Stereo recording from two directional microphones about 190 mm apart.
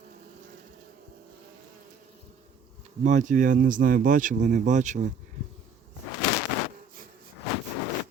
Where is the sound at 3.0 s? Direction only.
40° right (ahead or behind).